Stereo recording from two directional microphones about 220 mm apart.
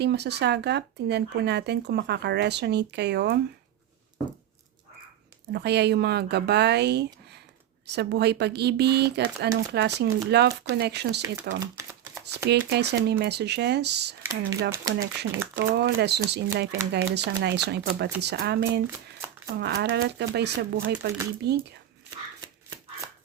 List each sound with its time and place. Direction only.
0.0 s speech: 50° right (ahead or behind)
5.5 s speech: 50° right (ahead or behind)
11.6 s a sound: 10° right (ahead or behind)
12.5 s speech: 50° right (ahead or behind)
14.7 s speech: 15° right (ahead or behind)
15.2 s speech: 50° right (ahead or behind)